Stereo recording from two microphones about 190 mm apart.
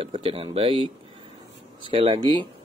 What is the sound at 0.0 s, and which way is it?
Speech, 30° right (ahead or behind).